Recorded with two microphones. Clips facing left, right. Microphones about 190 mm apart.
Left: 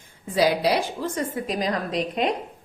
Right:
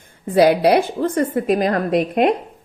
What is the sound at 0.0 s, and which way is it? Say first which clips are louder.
A woman's voice: right 7 dB; 60° right (ahead or behind).